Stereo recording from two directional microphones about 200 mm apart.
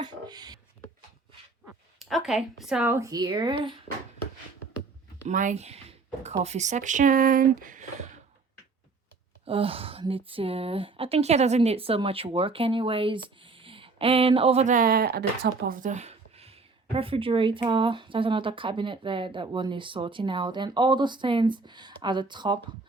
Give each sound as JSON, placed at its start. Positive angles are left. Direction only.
{"t": 0.0, "sound": "a sound", "side_deg": -20}
{"t": 2.0, "sound": "speech", "side_deg": 0}
{"t": 5.3, "sound": "speech", "side_deg": -40}
{"t": 9.4, "sound": "speech", "side_deg": -25}